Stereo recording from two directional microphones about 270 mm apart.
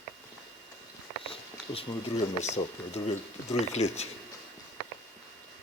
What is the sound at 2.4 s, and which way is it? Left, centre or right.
Speech, left.